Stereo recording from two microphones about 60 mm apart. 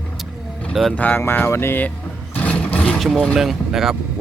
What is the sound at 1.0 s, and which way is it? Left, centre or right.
Speech, left.